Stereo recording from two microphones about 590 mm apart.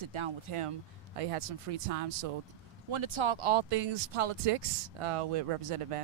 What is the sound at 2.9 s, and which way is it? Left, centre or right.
Speech, right.